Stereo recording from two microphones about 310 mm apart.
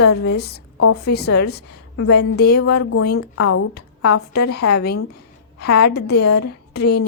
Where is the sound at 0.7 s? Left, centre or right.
Left.